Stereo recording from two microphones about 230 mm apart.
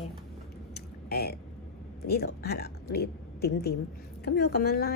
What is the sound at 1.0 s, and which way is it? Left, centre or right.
A woman's voice, left.